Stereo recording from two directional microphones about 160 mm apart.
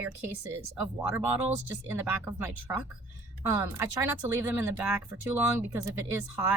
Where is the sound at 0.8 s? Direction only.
10° right (ahead or behind).